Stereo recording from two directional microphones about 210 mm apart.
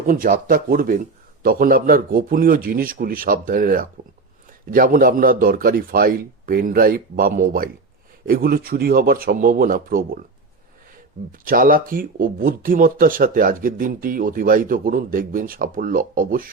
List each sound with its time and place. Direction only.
0.1 s a man's voice: 40° right (ahead or behind)
11.3 s speech: 40° right (ahead or behind)